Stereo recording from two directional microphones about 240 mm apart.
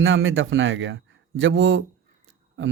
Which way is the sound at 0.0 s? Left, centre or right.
Right.